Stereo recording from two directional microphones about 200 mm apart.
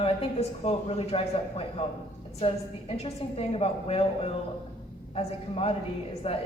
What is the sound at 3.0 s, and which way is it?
A woman's voice, 30° left (ahead or behind).